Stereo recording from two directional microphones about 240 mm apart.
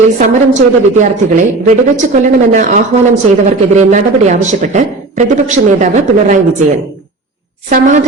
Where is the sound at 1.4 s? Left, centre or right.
Right.